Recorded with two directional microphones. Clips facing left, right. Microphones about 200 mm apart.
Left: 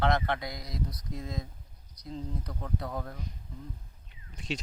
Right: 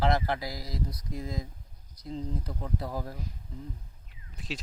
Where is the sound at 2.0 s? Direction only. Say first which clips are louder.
Right 3 dB; 25° right (ahead or behind).